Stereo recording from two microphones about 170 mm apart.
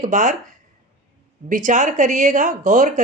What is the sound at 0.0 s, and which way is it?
Speech, 50° right (ahead or behind).